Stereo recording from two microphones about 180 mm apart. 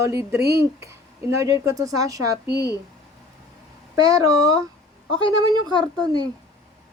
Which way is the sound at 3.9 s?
20° right (ahead or behind).